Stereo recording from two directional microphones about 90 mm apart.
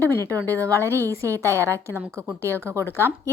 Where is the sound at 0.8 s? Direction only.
30° right (ahead or behind).